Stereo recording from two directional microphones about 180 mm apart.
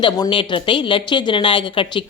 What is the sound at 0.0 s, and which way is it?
A woman's voice, 25° left (ahead or behind).